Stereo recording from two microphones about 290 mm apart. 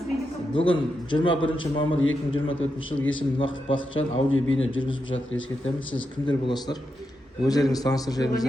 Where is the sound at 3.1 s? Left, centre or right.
Centre.